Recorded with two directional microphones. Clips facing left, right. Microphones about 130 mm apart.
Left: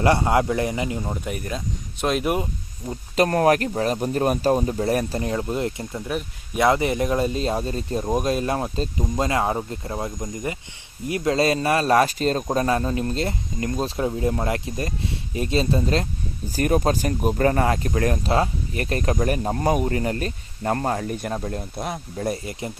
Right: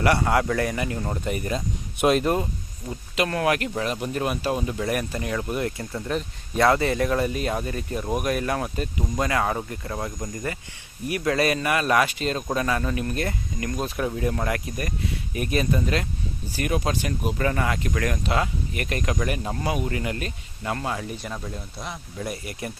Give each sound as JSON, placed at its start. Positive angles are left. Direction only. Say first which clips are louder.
{"t": 0.0, "sound": "speech", "louder": "left 2 dB", "side_deg": 25}
{"t": 1.0, "sound": "speech", "louder": "right 1 dB", "side_deg": 5}
{"t": 2.2, "sound": "speech", "louder": "even", "side_deg": 15}
{"t": 3.2, "sound": "speech", "louder": "left 5 dB", "side_deg": 40}
{"t": 6.1, "sound": "speech", "louder": "right 1 dB", "side_deg": 10}
{"t": 22.3, "sound": "speech", "louder": "left 5 dB", "side_deg": 25}